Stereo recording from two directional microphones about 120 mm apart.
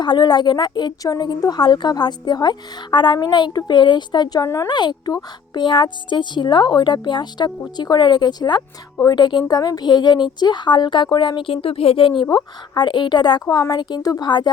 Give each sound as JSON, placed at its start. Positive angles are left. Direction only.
{"t": 0.0, "sound": "speech", "side_deg": 35}
{"t": 4.7, "sound": "speech", "side_deg": 40}
{"t": 12.2, "sound": "speech", "side_deg": 40}